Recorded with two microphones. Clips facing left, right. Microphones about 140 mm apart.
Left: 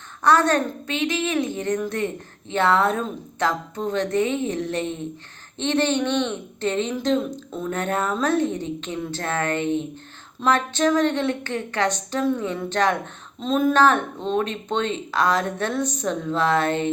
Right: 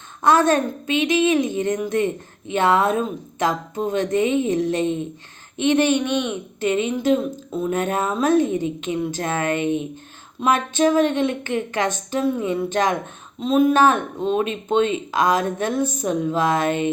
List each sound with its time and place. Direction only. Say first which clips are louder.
0.2 s speech: right 2 dB; 15° right (ahead or behind)
13.4 s speech: right 2 dB; 5° right (ahead or behind)